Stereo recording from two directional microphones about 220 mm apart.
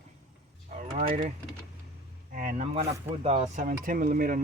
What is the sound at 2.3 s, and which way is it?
Speech, 35° right (ahead or behind).